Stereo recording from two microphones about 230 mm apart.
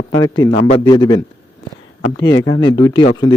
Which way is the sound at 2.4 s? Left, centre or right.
Centre.